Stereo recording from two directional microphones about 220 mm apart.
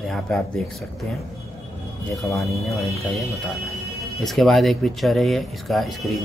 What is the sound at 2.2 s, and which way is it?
Speech, centre (ahead or behind).